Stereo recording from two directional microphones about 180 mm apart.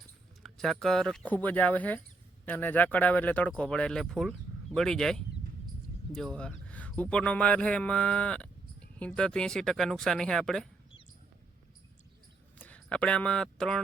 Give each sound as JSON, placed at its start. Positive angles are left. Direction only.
{"t": 0.4, "sound": "a man's voice", "side_deg": 0}
{"t": 12.5, "sound": "speech", "side_deg": 10}